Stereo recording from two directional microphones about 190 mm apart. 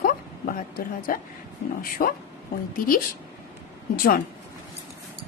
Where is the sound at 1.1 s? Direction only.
45° left (ahead or behind).